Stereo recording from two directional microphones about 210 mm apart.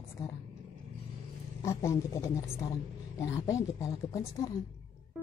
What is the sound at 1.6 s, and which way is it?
A woman's voice, 15° left (ahead or behind).